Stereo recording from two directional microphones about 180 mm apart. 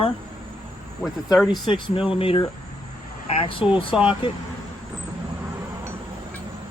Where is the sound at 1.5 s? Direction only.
25° left (ahead or behind).